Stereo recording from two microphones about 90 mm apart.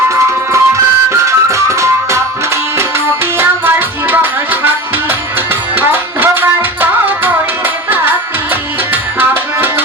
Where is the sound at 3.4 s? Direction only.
25° right (ahead or behind).